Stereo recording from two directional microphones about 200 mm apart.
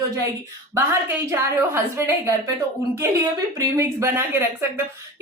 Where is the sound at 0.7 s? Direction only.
15° right (ahead or behind).